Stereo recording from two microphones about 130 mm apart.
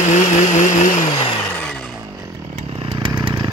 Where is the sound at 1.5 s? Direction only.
5° left (ahead or behind).